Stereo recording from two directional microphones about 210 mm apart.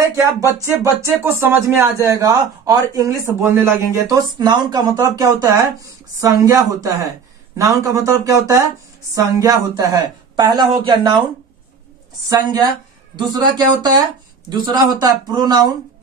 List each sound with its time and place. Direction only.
0.0 s music: 15° right (ahead or behind)
0.6 s speech: 10° right (ahead or behind)
12.3 s speech: 20° right (ahead or behind)